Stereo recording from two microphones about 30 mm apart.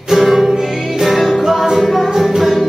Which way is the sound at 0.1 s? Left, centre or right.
Centre.